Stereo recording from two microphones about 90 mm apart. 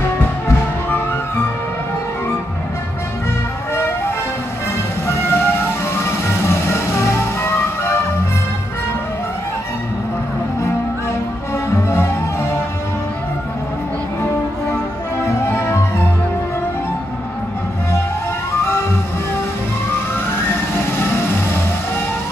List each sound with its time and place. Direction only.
5.0 s music: 30° left (ahead or behind)
15.4 s music: 30° left (ahead or behind)